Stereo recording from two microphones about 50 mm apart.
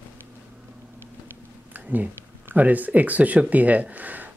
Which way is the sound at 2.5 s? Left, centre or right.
Right.